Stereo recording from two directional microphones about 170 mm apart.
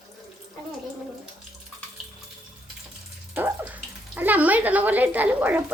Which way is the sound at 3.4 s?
10° right (ahead or behind).